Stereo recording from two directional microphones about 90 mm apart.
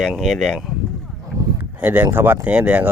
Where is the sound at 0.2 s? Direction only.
5° left (ahead or behind).